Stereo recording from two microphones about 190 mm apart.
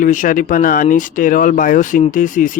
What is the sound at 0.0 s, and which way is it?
Speech, 45° left (ahead or behind).